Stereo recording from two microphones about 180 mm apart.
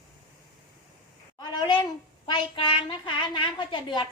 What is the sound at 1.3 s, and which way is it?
A child's voice, 25° left (ahead or behind).